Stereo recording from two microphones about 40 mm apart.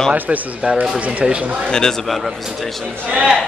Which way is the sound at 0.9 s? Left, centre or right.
Right.